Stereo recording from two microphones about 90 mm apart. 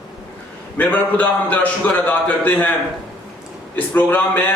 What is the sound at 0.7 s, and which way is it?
A man's voice, 20° left (ahead or behind).